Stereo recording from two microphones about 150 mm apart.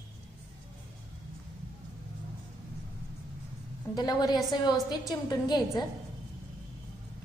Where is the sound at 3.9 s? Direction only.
25° left (ahead or behind).